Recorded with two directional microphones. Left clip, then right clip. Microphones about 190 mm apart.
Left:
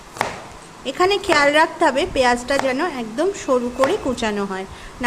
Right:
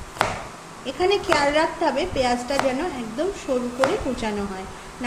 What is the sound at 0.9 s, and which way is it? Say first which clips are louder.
A woman's voice: left 3 dB; 25° left (ahead or behind).